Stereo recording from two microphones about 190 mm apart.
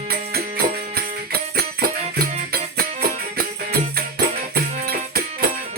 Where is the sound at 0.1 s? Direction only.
55° right (ahead or behind).